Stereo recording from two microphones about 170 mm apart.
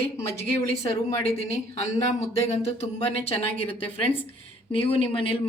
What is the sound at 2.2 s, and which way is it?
Speech, 40° left (ahead or behind).